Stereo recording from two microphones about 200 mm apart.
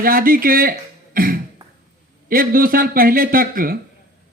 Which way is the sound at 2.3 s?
45° right (ahead or behind).